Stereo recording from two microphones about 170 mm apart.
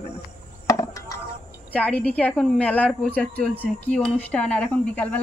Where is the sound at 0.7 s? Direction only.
20° left (ahead or behind).